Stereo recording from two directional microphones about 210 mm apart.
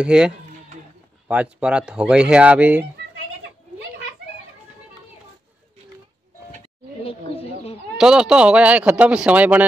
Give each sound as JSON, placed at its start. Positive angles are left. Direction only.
{"t": 0.0, "sound": "a man's voice", "side_deg": -5}
{"t": 8.0, "sound": "a man's voice", "side_deg": -5}